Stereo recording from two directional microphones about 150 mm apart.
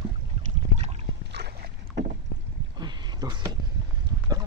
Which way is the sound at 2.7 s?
30° right (ahead or behind).